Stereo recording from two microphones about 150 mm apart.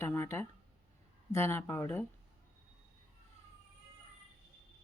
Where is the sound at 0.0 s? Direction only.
15° left (ahead or behind).